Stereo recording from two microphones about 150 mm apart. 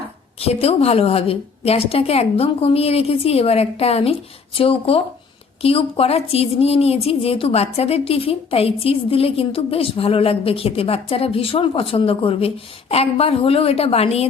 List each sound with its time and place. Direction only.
0.3 s a woman's voice: 40° left (ahead or behind)